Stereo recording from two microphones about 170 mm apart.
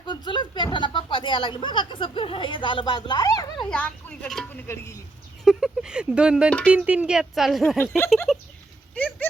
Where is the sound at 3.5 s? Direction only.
5° left (ahead or behind).